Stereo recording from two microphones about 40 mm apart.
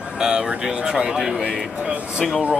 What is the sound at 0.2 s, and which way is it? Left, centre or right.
Speech, centre.